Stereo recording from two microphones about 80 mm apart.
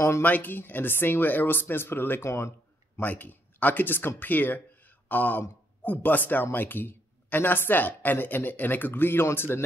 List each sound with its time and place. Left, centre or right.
0.2 s a man's voice: left
3.0 s a man's voice: left